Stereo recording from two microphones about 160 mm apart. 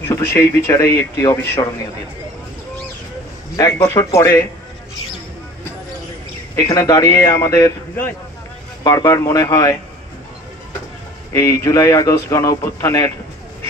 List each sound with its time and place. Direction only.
0.1 s speech: 15° left (ahead or behind)
3.5 s speech: 20° left (ahead or behind)
6.5 s speech: 20° left (ahead or behind)
11.3 s speech: 20° left (ahead or behind)